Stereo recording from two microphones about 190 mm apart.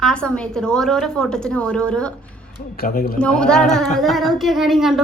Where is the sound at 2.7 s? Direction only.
50° left (ahead or behind).